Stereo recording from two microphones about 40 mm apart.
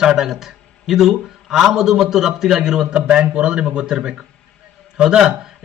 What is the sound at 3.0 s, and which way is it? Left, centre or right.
A man's voice, right.